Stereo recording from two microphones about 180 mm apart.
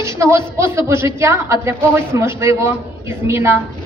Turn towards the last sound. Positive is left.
turn(degrees=-15)  # may be behind; listen again after turning